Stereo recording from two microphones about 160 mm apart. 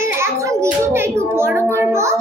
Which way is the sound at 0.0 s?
15° right (ahead or behind).